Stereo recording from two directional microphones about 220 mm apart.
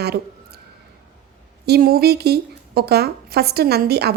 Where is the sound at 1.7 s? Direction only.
45° right (ahead or behind).